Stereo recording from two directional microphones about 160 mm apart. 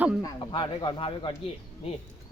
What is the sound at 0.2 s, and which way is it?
Speech, 25° left (ahead or behind).